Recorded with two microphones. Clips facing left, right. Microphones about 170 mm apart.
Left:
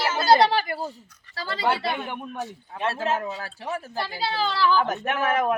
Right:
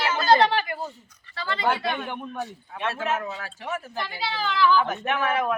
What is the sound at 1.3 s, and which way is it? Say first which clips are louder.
Speech: right 1 dB; 35° left (ahead or behind).